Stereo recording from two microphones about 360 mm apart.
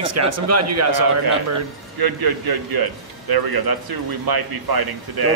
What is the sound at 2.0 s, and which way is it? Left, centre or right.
A man's voice, right.